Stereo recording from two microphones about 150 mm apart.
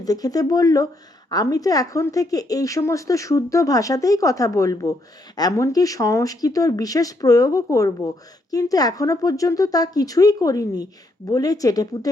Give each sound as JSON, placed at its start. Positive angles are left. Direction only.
{"t": 0.0, "sound": "speech", "side_deg": 25}